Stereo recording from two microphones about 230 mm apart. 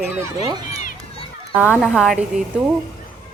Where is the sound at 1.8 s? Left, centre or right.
Centre.